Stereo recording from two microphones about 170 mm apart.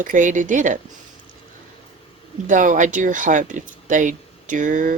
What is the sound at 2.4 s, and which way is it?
Speech, 50° right (ahead or behind).